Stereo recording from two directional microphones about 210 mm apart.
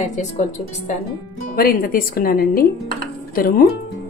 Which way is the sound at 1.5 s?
45° left (ahead or behind).